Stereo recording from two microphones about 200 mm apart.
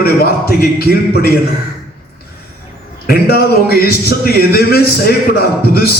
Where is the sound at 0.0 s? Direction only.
50° left (ahead or behind).